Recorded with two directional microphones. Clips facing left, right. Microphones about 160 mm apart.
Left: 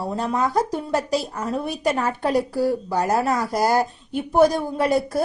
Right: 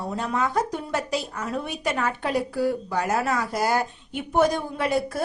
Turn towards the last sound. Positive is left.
turn(degrees=40)  # may be behind; listen again after turning